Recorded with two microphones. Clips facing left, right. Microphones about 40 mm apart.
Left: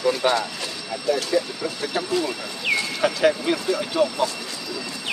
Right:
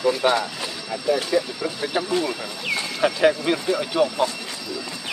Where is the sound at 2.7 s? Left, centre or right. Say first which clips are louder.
Left 3 dB; left.